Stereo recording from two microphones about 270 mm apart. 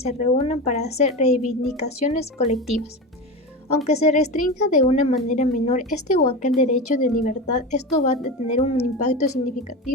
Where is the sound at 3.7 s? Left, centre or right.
Left.